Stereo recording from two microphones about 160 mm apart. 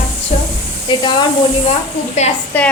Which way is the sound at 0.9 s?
30° left (ahead or behind).